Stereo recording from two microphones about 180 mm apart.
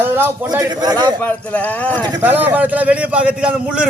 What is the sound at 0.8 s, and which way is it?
Speech, 20° right (ahead or behind).